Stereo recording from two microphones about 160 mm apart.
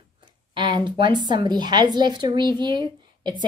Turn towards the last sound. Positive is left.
turn(degrees=-30)  # may be behind; listen again after turning